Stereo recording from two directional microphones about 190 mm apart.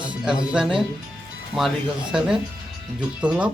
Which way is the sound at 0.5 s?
5° right (ahead or behind).